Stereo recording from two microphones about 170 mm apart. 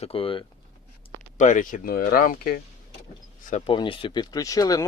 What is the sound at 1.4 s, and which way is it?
Speech, 50° left (ahead or behind).